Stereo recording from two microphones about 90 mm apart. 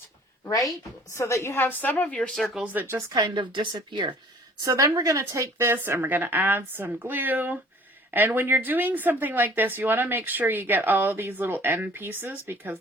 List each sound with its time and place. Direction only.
0.4 s speech: 35° left (ahead or behind)
1.5 s a woman's voice: 20° left (ahead or behind)
2.3 s speech: centre (ahead or behind)
2.7 s speech: 30° right (ahead or behind)
3.1 s a woman's voice: 55° right (ahead or behind)
4.6 s speech: 35° right (ahead or behind)